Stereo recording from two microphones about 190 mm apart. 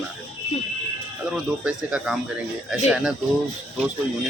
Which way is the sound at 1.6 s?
5° right (ahead or behind).